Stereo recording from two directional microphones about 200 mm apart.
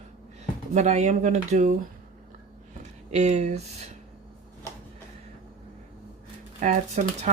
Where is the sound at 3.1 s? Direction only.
35° right (ahead or behind).